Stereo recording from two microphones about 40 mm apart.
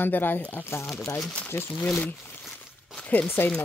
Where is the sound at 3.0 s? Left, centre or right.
Left.